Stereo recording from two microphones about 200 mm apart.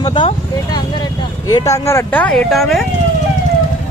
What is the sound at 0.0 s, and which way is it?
Speech, 25° left (ahead or behind).